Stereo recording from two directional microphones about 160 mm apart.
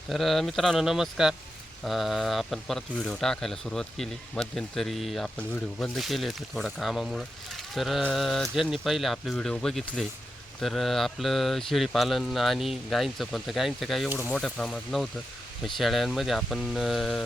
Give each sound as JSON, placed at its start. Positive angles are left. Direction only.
{"t": 0.1, "sound": "speech", "side_deg": 0}